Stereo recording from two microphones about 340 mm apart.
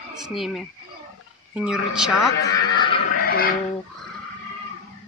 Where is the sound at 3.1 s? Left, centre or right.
Left.